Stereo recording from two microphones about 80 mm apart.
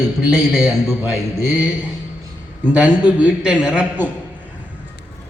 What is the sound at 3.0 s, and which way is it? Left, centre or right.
Speech, centre.